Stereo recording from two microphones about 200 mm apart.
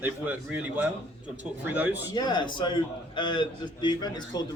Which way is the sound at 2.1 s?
20° left (ahead or behind).